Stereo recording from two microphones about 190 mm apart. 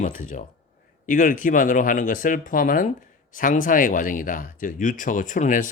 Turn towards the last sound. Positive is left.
turn(degrees=45)  # may be behind; listen again after turning